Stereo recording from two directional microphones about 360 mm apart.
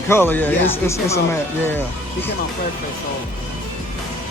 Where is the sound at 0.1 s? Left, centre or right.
Centre.